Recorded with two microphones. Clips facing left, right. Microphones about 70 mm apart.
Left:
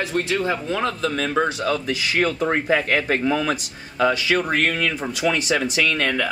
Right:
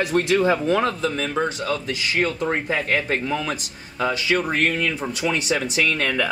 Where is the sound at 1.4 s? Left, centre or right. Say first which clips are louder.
Left 2 dB; centre.